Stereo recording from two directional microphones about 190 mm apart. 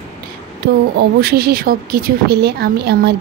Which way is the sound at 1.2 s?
55° right (ahead or behind).